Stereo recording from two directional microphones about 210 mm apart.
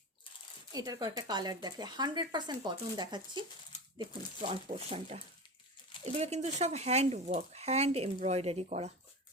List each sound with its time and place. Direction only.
0.7 s speech: 15° right (ahead or behind)
4.4 s speech: 30° right (ahead or behind)